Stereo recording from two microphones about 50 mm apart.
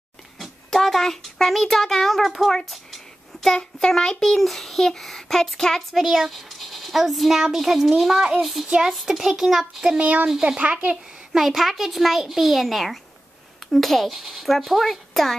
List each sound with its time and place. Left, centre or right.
0.4 s a child's voice: centre
3.5 s a child's voice: centre
9.9 s speech: right
10.2 s speech: centre
11.3 s a child's voice: centre